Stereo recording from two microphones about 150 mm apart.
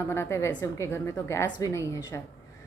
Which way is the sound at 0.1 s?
15° left (ahead or behind).